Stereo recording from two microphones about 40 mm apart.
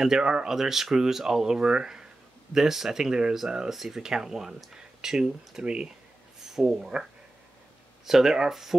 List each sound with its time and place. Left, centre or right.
0.0 s speech: centre
2.5 s speech: centre
5.6 s speech: right
6.4 s speech: centre
8.0 s speech: centre